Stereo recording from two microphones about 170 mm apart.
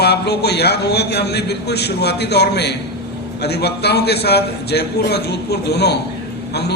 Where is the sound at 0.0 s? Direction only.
75° left (ahead or behind).